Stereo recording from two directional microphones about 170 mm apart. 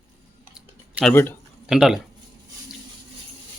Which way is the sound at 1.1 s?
10° left (ahead or behind).